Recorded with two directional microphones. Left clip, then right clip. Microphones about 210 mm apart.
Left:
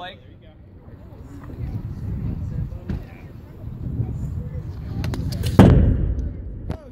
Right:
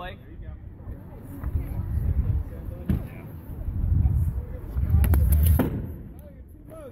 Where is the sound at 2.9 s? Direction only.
45° right (ahead or behind).